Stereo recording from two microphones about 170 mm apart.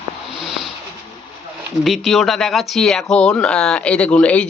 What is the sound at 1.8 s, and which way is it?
Speech, centre (ahead or behind).